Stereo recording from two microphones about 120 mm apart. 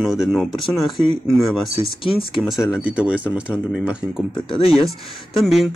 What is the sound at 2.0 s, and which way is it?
Speech, 50° left (ahead or behind).